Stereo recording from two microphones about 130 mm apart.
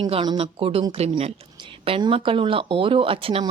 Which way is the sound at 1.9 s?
40° right (ahead or behind).